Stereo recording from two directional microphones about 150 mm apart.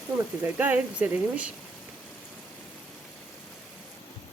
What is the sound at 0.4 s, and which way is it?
Speech, 10° right (ahead or behind).